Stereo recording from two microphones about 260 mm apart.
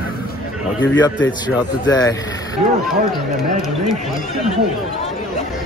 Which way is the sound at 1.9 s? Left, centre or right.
Centre.